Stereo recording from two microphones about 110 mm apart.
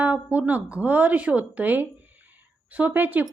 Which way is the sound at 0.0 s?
15° right (ahead or behind).